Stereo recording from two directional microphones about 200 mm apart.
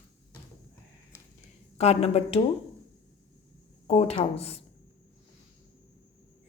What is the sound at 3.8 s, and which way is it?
Speech, 30° left (ahead or behind).